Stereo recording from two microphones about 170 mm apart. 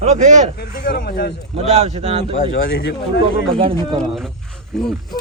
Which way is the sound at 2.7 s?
70° left (ahead or behind).